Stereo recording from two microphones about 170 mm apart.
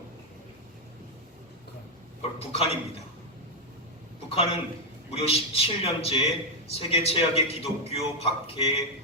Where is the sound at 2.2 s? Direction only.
35° left (ahead or behind).